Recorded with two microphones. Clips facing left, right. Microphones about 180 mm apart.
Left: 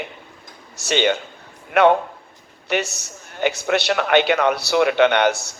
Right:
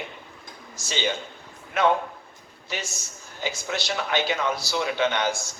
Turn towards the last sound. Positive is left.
turn(degrees=65)  # may be behind; listen again after turning